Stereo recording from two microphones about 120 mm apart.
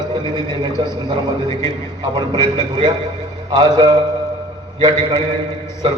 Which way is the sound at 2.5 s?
40° right (ahead or behind).